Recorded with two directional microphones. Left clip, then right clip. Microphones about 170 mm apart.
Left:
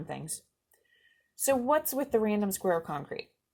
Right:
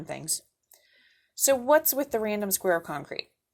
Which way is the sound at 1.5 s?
35° right (ahead or behind).